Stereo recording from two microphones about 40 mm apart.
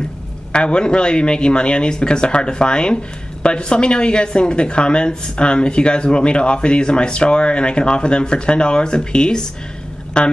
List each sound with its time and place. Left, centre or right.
0.5 s speech: left